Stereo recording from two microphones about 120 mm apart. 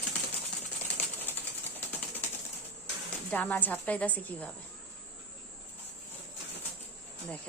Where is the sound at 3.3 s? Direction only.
15° left (ahead or behind).